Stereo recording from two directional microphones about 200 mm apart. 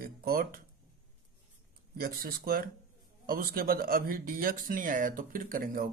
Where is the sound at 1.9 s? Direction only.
50° right (ahead or behind).